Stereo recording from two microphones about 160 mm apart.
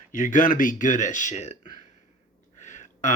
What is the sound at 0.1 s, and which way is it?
Speech, 50° left (ahead or behind).